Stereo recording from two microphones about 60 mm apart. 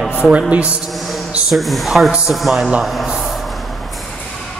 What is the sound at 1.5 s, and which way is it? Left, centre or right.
A man's voice, centre.